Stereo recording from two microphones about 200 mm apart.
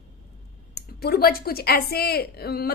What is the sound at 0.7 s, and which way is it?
A woman's voice, 50° left (ahead or behind).